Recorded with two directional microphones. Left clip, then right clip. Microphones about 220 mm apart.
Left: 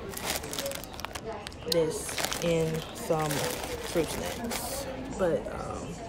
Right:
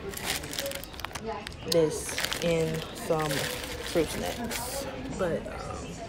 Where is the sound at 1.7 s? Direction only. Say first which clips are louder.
Right 2 dB; centre (ahead or behind).